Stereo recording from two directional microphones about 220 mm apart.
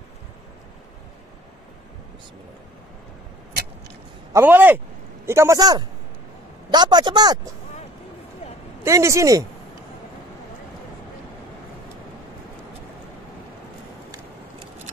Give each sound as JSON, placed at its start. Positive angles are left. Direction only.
{"t": 4.3, "sound": "a man's voice", "side_deg": -10}
{"t": 8.8, "sound": "speech", "side_deg": -15}